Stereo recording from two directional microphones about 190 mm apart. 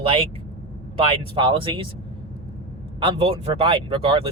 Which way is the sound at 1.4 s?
25° right (ahead or behind).